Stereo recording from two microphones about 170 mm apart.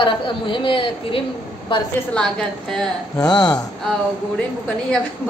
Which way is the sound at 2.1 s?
5° left (ahead or behind).